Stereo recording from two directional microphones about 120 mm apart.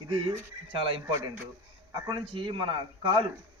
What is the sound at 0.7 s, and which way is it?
Speech, 45° right (ahead or behind).